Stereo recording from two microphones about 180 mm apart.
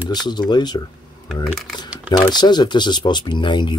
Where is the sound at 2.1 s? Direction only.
25° left (ahead or behind).